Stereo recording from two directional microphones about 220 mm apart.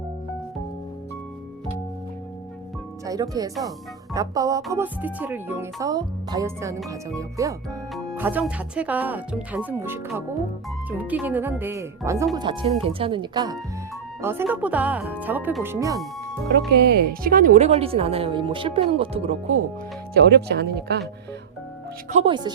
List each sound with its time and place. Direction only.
3.1 s speech: 15° right (ahead or behind)
16.5 s speech: 45° right (ahead or behind); by 19.5 s 30° right (ahead or behind)
20.1 s speech: 50° right (ahead or behind)
22.1 s speech: 25° right (ahead or behind)